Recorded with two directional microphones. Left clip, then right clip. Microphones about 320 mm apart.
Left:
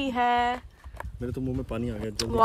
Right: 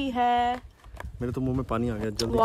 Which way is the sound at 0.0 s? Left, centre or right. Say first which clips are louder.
Even; centre.